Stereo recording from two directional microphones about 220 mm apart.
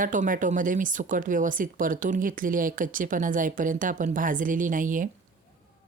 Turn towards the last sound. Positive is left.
turn(degrees=-35)  # may be behind; listen again after turning